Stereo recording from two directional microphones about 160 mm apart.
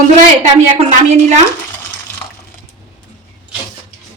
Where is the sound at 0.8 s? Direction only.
45° right (ahead or behind).